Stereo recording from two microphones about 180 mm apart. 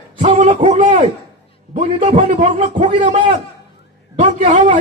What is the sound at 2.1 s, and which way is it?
Speech, 45° right (ahead or behind).